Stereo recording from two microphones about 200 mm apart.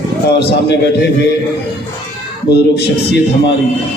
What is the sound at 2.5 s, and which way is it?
A man's voice, 55° left (ahead or behind).